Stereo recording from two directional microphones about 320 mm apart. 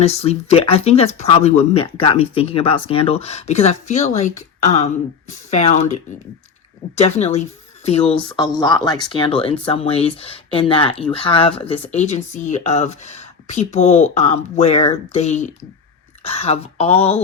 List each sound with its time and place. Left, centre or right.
0.0 s speech: centre
5.5 s speech: left
6.9 s speech: centre